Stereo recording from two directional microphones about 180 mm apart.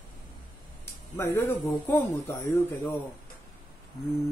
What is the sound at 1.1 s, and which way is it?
Speech, 15° left (ahead or behind).